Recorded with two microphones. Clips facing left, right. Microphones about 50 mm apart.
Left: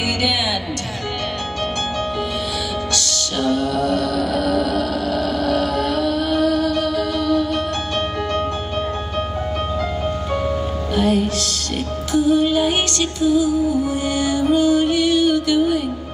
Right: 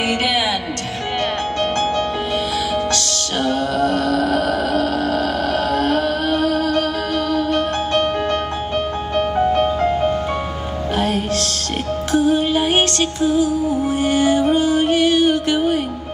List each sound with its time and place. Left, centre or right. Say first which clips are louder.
2.9 s music: right 2 dB; right
11.0 s music: left 2 dB; right